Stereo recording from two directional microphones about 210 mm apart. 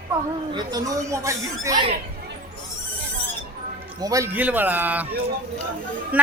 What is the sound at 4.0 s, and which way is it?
A woman's voice, 15° right (ahead or behind).